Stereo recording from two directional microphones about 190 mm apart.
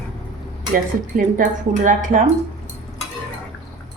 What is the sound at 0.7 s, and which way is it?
Speech, 45° right (ahead or behind).